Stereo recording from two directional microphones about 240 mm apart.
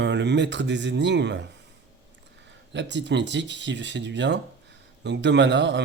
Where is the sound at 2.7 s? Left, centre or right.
Right.